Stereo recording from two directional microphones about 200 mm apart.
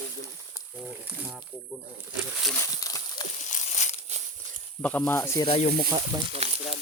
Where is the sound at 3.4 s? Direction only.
35° left (ahead or behind).